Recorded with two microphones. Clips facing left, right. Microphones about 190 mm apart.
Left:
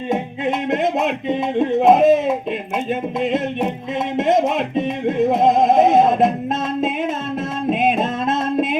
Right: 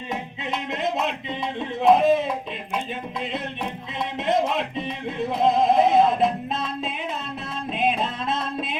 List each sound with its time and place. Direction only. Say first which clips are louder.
0.1 s a sound: left 9 dB; 50° left (ahead or behind)
4.2 s music: left 5 dB; 45° left (ahead or behind)
7.7 s music: left 6 dB; 45° left (ahead or behind)